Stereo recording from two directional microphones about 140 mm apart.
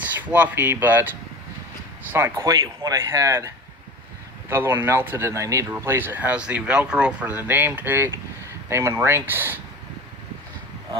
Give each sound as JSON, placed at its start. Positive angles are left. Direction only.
{"t": 0.0, "sound": "speech", "side_deg": -10}